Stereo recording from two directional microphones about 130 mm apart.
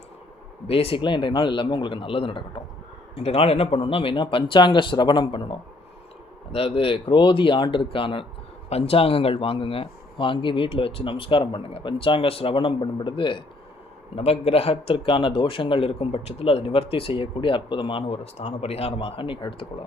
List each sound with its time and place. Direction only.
0.7 s a man's voice: 45° left (ahead or behind)
14.2 s a man's voice: 50° left (ahead or behind)